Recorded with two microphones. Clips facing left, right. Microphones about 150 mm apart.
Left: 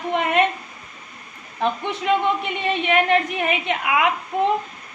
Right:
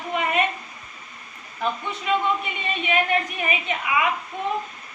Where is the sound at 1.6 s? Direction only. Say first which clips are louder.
Left 4 dB; 70° left (ahead or behind).